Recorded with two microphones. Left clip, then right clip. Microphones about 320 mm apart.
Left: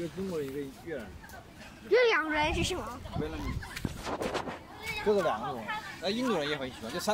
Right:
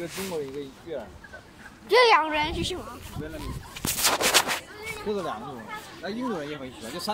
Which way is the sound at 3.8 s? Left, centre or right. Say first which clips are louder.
Right 12 dB; right.